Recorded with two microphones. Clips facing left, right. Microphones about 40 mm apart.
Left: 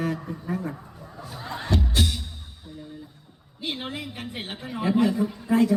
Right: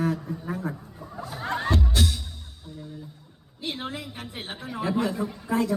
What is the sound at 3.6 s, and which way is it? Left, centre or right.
A woman's voice, centre.